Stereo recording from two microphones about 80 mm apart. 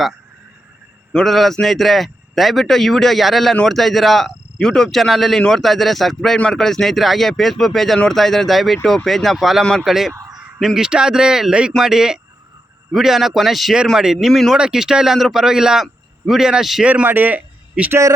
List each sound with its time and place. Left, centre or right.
1.1 s a man's voice: centre
10.1 s crow: right
10.6 s a man's voice: centre
16.8 s a man's voice: centre